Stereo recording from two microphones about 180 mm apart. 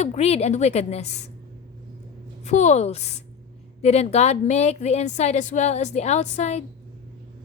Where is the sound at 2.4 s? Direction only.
40° left (ahead or behind).